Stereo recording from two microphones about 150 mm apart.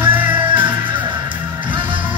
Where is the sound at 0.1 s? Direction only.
10° right (ahead or behind).